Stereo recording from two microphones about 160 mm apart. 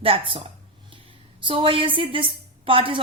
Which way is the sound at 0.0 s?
35° right (ahead or behind).